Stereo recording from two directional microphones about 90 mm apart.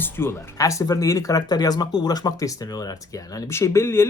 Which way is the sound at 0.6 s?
35° left (ahead or behind).